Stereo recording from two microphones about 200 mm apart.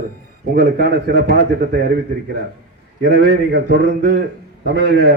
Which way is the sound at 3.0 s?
55° right (ahead or behind).